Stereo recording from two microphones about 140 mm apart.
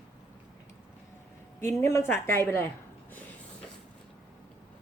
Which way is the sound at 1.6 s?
20° left (ahead or behind).